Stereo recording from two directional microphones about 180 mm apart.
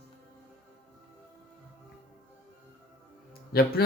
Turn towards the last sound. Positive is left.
turn(degrees=60)  # may be behind; listen again after turning